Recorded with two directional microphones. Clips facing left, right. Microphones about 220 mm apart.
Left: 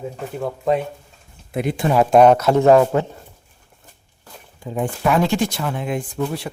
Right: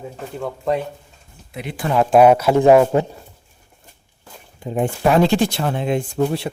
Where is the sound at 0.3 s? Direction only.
5° left (ahead or behind).